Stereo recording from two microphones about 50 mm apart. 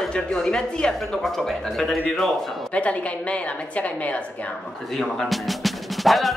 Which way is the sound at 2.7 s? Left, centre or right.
Left.